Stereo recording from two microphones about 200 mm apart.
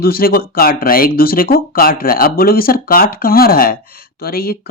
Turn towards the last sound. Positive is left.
turn(degrees=50)  # may be behind; listen again after turning